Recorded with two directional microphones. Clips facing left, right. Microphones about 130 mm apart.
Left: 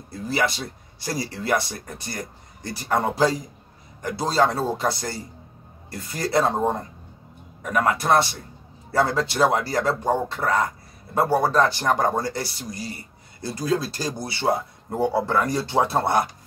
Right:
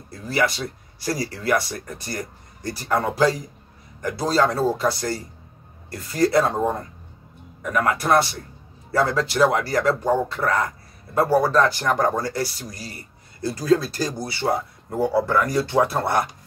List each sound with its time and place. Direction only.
0.3 s speech: 25° left (ahead or behind)
7.7 s speech: 25° left (ahead or behind)